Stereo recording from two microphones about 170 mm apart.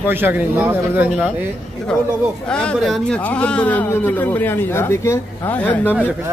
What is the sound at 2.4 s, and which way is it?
Speech, 5° left (ahead or behind).